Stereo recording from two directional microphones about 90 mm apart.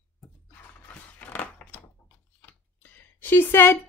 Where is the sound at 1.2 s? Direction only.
20° left (ahead or behind).